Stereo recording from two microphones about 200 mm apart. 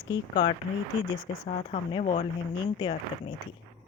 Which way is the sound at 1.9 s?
25° left (ahead or behind).